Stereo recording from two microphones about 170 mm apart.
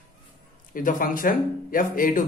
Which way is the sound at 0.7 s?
55° left (ahead or behind).